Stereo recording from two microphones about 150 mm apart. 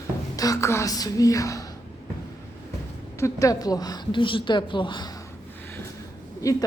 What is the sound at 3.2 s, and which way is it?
A woman's voice, 20° left (ahead or behind).